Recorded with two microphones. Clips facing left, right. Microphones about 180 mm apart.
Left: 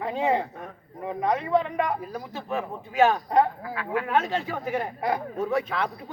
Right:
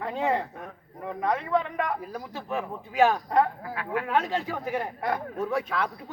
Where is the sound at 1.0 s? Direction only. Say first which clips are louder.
Left 2 dB; 20° left (ahead or behind).